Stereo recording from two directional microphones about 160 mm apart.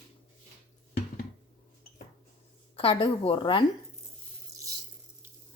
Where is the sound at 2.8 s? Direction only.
35° left (ahead or behind).